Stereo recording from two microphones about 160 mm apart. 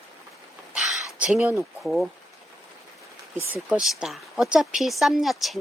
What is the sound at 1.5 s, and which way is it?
Speech, 5° right (ahead or behind).